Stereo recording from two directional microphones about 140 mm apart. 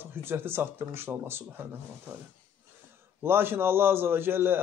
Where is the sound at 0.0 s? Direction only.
15° right (ahead or behind).